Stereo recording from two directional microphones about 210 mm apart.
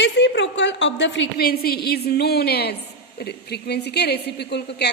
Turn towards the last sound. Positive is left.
turn(degrees=50)  # may be behind; listen again after turning